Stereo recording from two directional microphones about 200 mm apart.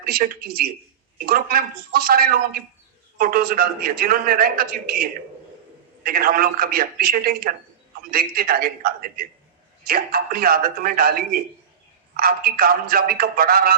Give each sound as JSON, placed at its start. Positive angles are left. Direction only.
{"t": 0.0, "sound": "a man's voice", "side_deg": -50}